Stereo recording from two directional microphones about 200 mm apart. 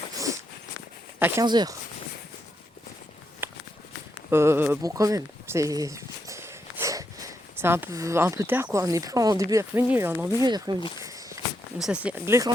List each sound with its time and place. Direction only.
0.1 s a sound: 15° right (ahead or behind)
1.2 s speech: 20° right (ahead or behind)
3.4 s walk: 10° right (ahead or behind)
4.3 s speech: 10° right (ahead or behind)
10.4 s speech: 20° right (ahead or behind)
11.0 s walk: 15° right (ahead or behind)
11.8 s speech: 5° right (ahead or behind)